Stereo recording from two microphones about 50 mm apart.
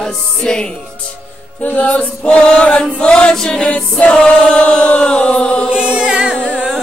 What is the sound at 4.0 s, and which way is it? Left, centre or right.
Choir, left.